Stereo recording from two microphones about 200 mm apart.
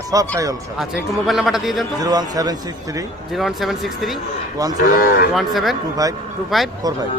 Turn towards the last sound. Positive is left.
turn(degrees=0)  # may be behind; listen again after turning